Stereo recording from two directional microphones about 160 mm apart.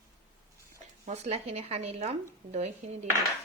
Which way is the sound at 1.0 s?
45° right (ahead or behind).